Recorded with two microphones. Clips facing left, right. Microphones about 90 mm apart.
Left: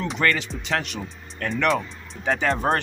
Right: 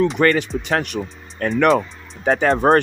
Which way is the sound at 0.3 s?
45° right (ahead or behind).